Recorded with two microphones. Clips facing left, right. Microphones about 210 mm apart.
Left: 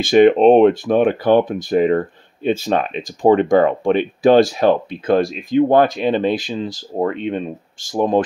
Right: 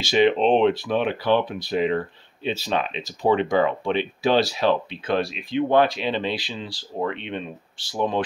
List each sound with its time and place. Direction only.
0.0 s speech: 50° left (ahead or behind)